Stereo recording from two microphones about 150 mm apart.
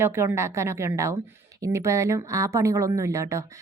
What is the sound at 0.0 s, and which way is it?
A woman's voice, 15° right (ahead or behind).